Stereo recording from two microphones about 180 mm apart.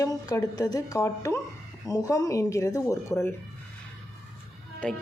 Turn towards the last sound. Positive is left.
turn(degrees=5)  # may be behind; listen again after turning